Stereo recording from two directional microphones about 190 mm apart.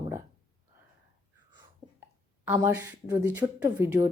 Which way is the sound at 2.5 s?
10° right (ahead or behind).